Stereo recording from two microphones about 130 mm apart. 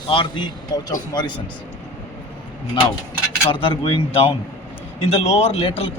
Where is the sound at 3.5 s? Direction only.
40° left (ahead or behind).